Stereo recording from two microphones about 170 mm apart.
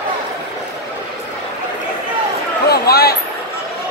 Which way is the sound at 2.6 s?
65° left (ahead or behind).